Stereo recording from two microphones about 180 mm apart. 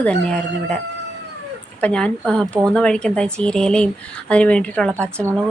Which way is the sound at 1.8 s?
5° left (ahead or behind).